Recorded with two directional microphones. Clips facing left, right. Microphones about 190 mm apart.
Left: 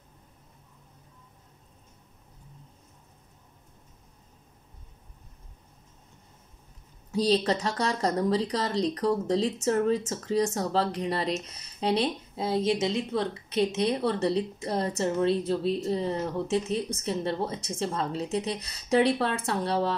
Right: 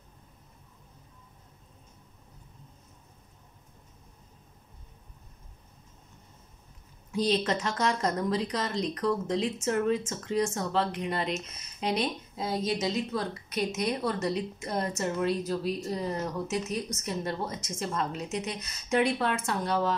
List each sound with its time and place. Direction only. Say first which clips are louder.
7.1 s a woman's voice: left 3 dB; 35° left (ahead or behind)